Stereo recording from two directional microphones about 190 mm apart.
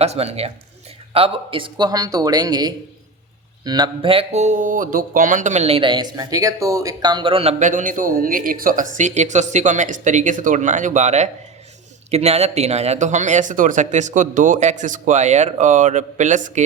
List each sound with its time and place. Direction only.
0.0 s speech: 35° right (ahead or behind)
7.6 s speech: 40° right (ahead or behind)